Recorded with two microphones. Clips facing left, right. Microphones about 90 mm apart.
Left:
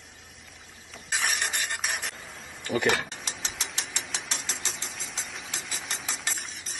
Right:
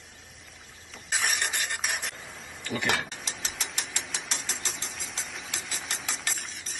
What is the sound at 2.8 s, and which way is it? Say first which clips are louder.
Speech: left 2 dB; 15° left (ahead or behind).